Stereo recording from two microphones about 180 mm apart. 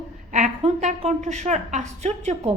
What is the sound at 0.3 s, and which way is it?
A woman's voice, 45° right (ahead or behind).